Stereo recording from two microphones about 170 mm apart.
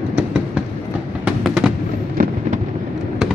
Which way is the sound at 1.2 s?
5° right (ahead or behind).